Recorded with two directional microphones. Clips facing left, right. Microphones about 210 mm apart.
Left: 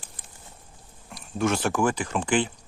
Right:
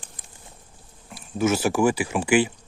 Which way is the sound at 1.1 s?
5° right (ahead or behind).